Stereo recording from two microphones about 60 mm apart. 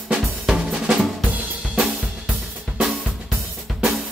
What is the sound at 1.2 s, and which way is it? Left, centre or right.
Drum kit, right.